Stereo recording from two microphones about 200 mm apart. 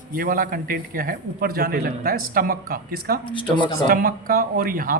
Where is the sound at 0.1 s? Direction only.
45° right (ahead or behind).